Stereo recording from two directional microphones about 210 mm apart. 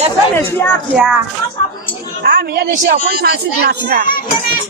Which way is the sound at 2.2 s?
45° right (ahead or behind).